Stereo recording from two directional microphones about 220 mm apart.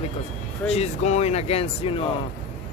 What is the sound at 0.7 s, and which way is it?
Speech, 30° left (ahead or behind).